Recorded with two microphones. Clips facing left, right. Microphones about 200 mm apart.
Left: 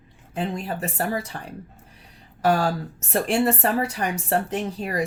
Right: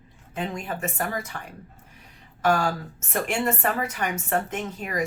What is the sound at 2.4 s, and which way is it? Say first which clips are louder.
Speech: left 2 dB; 35° left (ahead or behind).